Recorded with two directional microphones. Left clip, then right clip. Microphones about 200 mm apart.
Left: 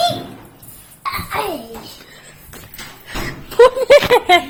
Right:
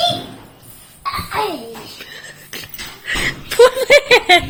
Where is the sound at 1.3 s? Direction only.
35° left (ahead or behind).